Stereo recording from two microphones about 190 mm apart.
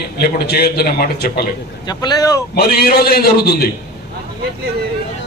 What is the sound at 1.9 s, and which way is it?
Speech, 20° left (ahead or behind).